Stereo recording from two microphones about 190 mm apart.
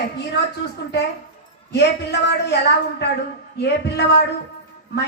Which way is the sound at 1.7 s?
65° left (ahead or behind).